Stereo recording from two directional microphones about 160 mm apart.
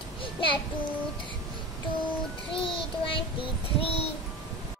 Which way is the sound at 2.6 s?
35° left (ahead or behind).